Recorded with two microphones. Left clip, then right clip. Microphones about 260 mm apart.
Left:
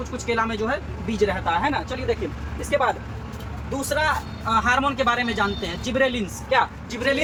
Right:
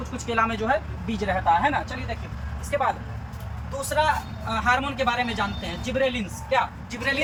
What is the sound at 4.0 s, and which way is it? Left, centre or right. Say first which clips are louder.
Speech: right 2 dB; centre.